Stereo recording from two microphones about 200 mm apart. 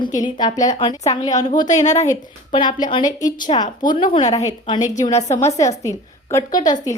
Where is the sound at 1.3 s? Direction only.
35° left (ahead or behind).